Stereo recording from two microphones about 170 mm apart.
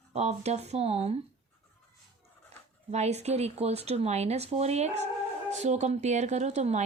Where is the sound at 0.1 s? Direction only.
40° right (ahead or behind).